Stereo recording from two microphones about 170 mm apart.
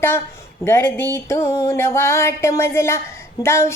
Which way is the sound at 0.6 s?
15° left (ahead or behind).